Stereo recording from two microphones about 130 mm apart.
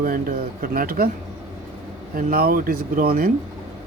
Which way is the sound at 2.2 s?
90° right.